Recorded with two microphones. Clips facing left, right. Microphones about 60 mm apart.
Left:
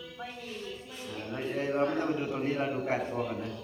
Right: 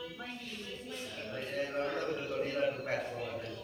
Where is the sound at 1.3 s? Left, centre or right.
Left.